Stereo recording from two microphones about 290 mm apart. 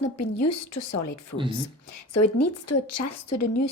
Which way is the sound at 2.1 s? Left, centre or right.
Left.